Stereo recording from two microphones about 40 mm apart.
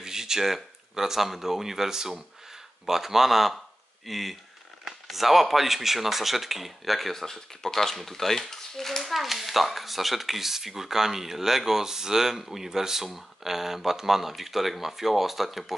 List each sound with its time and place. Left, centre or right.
0.0 s speech: centre